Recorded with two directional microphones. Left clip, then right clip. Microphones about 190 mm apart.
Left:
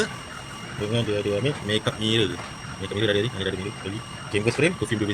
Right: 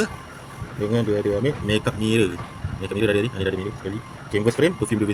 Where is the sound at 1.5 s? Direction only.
60° right (ahead or behind).